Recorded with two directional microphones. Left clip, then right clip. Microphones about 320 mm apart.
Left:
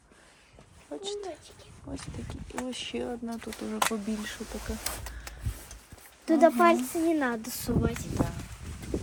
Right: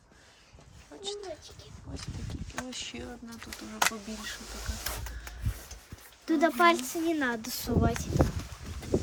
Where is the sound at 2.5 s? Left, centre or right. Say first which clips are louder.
Left 4 dB; centre.